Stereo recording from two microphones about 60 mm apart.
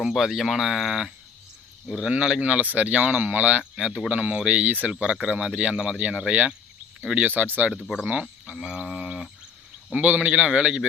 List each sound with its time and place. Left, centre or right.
0.0 s speech: centre
7.3 s speech: right
9.9 s speech: right